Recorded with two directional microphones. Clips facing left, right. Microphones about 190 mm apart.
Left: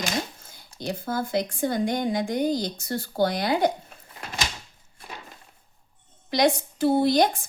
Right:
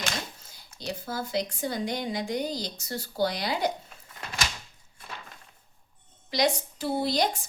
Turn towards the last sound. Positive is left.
turn(degrees=55)  # may be behind; listen again after turning